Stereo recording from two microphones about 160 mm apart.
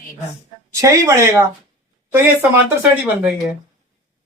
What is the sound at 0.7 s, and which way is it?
Speech, 20° right (ahead or behind).